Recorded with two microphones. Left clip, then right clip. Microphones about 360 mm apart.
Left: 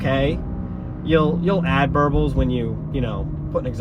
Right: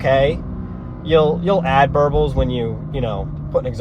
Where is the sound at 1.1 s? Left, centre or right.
Right.